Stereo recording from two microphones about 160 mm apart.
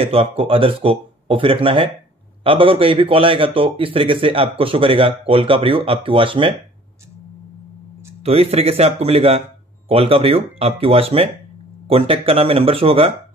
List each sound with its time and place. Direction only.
0.0 s speech: 35° right (ahead or behind)
8.2 s speech: 40° right (ahead or behind)